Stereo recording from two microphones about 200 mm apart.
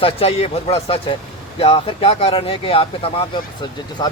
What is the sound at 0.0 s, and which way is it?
Speech, 30° left (ahead or behind).